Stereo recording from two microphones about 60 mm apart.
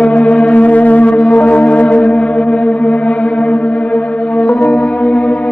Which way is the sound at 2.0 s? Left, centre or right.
Centre.